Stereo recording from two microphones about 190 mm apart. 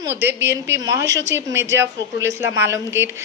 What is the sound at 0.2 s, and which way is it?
Speech, 60° right (ahead or behind).